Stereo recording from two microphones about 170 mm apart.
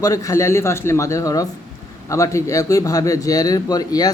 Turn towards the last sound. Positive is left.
turn(degrees=20)  # may be behind; listen again after turning